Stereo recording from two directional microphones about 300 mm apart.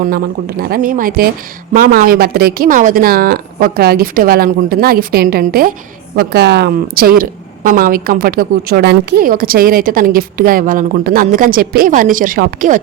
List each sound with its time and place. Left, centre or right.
0.0 s a woman's voice: right